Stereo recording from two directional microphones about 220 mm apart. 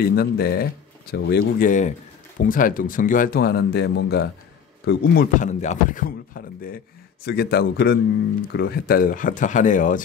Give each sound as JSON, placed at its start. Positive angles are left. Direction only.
{"t": 0.0, "sound": "speech", "side_deg": 45}